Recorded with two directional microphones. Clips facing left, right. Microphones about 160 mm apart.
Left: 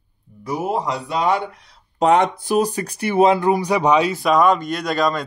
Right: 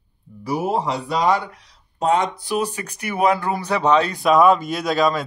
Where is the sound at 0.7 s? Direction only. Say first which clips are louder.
Even; 30° right (ahead or behind).